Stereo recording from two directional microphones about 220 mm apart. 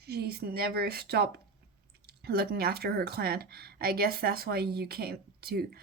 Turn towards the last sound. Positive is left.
turn(degrees=-45)  # may be behind; listen again after turning